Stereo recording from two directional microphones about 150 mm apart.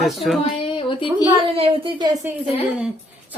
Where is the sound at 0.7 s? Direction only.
35° left (ahead or behind).